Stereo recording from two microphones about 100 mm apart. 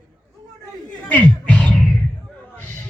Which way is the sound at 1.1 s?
15° left (ahead or behind).